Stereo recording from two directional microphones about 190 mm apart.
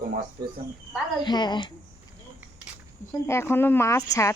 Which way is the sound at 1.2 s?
25° left (ahead or behind).